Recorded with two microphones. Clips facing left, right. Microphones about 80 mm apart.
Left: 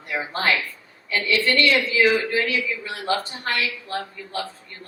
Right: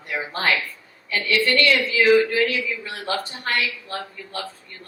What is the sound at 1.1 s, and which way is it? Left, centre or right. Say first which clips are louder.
A woman's voice: even; left.